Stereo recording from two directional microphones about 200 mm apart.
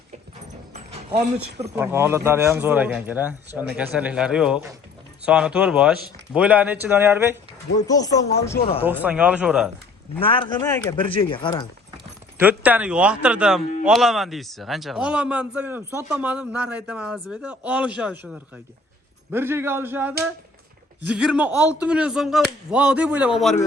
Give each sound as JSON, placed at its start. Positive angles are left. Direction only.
{"t": 0.7, "sound": "a sound", "side_deg": -35}
{"t": 1.7, "sound": "a man's voice", "side_deg": -10}
{"t": 7.9, "sound": "speech", "side_deg": 20}
{"t": 8.9, "sound": "a man's voice", "side_deg": -10}
{"t": 10.2, "sound": "a man's voice", "side_deg": 25}
{"t": 12.4, "sound": "a man's voice", "side_deg": -10}